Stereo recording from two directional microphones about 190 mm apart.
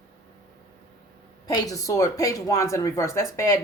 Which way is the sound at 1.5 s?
20° left (ahead or behind).